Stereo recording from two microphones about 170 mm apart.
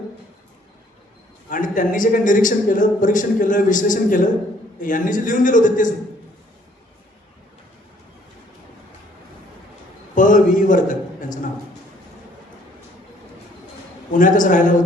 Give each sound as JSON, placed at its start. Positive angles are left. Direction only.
{"t": 1.5, "sound": "speech", "side_deg": 50}
{"t": 10.2, "sound": "a sound", "side_deg": 50}
{"t": 14.1, "sound": "speech", "side_deg": 50}